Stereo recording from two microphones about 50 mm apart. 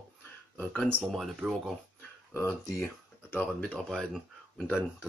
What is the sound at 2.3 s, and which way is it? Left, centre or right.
Speech, left.